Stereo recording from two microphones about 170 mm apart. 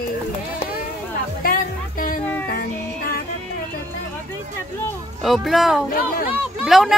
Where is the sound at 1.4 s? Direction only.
55° left (ahead or behind).